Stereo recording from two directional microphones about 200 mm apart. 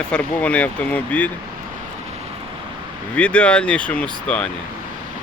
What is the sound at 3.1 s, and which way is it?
Speech, 5° left (ahead or behind).